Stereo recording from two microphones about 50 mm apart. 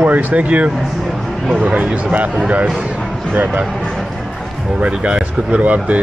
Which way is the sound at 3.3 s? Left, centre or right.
Right.